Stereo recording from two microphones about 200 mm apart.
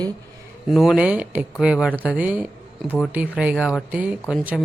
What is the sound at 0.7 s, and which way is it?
Speech, centre (ahead or behind).